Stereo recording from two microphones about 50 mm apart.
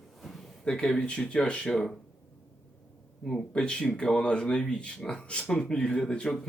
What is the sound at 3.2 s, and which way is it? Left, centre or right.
Speech, centre.